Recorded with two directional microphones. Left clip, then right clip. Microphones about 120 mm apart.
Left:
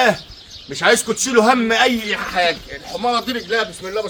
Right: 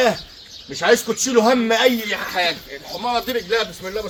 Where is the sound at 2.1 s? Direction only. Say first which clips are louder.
Left 3 dB; 5° left (ahead or behind).